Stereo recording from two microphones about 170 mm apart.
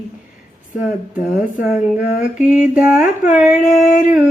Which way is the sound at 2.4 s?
5° right (ahead or behind).